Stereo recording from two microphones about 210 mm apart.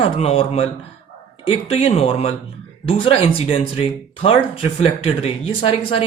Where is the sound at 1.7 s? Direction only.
25° left (ahead or behind).